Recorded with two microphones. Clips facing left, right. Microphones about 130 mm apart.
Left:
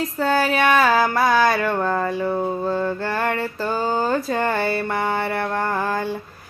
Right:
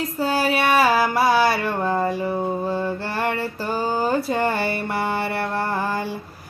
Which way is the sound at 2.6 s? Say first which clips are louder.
Left 2 dB; 15° right (ahead or behind).